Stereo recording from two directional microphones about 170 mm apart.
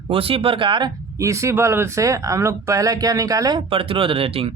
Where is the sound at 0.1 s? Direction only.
35° right (ahead or behind).